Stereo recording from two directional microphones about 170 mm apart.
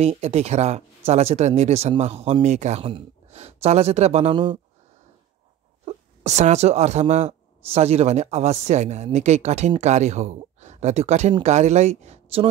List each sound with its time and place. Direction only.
0.0 s speech: 40° right (ahead or behind)
5.9 s speech: 45° right (ahead or behind)